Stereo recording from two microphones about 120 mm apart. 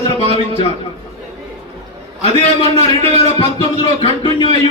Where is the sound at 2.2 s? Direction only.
55° left (ahead or behind).